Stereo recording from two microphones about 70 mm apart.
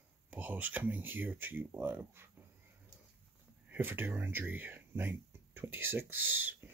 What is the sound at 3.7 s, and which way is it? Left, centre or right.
Speech, right.